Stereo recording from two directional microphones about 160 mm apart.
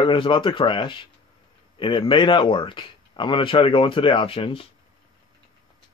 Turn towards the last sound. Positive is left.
turn(degrees=35)  # may be behind; listen again after turning